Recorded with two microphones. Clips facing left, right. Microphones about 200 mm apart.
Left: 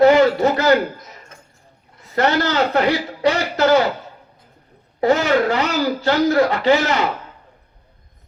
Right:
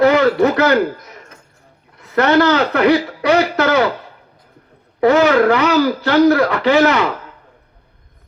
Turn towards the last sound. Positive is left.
turn(degrees=-60)  # may be behind; listen again after turning